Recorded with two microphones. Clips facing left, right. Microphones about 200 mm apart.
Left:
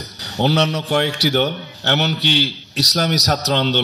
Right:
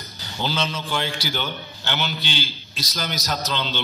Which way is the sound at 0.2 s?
65° left (ahead or behind).